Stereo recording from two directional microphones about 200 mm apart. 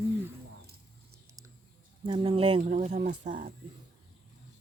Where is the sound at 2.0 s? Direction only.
25° right (ahead or behind).